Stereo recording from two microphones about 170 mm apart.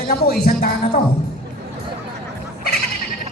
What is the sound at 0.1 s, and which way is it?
Speech, 65° left (ahead or behind).